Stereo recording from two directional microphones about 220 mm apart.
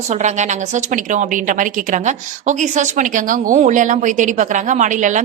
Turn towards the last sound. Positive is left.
turn(degrees=-35)  # may be behind; listen again after turning